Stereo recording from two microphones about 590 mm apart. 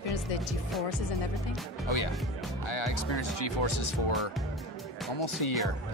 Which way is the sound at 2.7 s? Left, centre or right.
Left.